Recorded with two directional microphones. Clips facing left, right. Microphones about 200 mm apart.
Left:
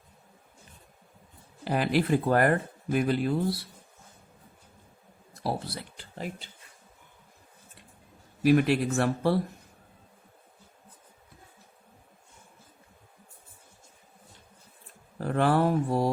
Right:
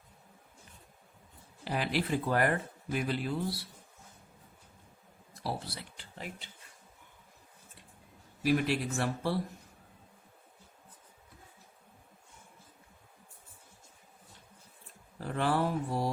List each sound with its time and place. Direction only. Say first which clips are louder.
1.6 s speech: left 7 dB; 50° left (ahead or behind)
5.4 s speech: left 6 dB; 50° left (ahead or behind)
8.4 s speech: left 7 dB; 60° left (ahead or behind)
15.2 s speech: left 6 dB; 60° left (ahead or behind)